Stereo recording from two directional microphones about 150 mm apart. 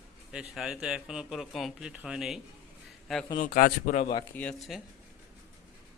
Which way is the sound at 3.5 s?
60° left (ahead or behind).